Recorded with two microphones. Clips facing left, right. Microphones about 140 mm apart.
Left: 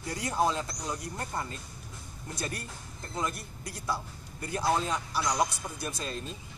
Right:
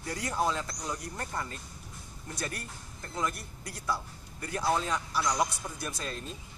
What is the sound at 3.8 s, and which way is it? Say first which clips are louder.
Speech: even; 25° left (ahead or behind).